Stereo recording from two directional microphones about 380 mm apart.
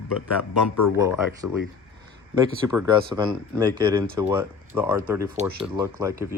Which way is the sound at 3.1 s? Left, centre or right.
Centre.